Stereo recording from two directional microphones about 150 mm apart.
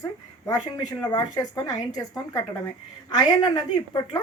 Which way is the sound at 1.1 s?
25° left (ahead or behind).